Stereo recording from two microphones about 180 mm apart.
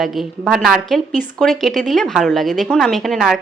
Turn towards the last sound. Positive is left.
turn(degrees=0)  # may be behind; listen again after turning